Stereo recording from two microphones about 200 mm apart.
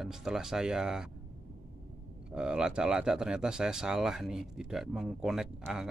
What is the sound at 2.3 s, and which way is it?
Speech, 5° right (ahead or behind).